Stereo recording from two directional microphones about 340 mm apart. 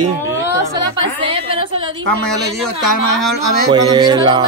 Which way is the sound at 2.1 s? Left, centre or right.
Centre.